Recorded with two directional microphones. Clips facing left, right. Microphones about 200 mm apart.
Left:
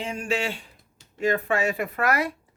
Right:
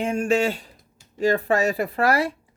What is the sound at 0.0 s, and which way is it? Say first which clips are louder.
Speech: right 7 dB; 50° right (ahead or behind).